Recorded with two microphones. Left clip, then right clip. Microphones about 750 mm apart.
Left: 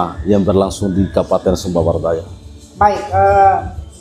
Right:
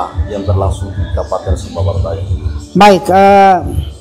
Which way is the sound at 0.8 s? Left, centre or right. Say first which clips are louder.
Left 9 dB; left.